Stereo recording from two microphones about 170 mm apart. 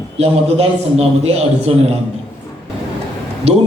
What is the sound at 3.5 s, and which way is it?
Speech, 40° right (ahead or behind).